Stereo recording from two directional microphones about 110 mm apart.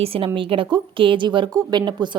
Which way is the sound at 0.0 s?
60° right (ahead or behind).